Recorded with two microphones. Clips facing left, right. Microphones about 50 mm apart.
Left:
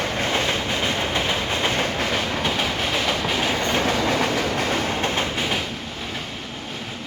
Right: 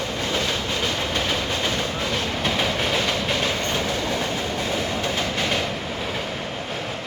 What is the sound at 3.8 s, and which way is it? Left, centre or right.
Train, left.